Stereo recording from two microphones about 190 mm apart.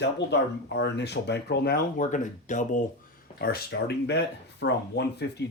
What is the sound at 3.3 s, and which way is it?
Speech, 55° left (ahead or behind).